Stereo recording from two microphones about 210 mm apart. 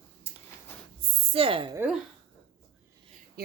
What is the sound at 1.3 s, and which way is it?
Speech, 25° right (ahead or behind).